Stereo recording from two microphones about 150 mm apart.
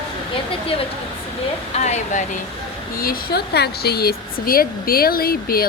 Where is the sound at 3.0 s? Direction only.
80° left.